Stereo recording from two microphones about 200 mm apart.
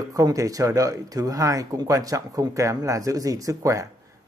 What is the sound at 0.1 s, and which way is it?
A man's voice, 15° right (ahead or behind).